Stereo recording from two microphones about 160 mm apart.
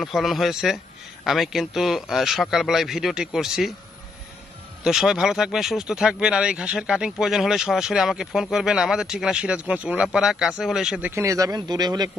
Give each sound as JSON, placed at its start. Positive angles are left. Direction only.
{"t": 0.0, "sound": "speech", "side_deg": 0}
{"t": 4.8, "sound": "speech", "side_deg": -5}
{"t": 11.1, "sound": "speech", "side_deg": -20}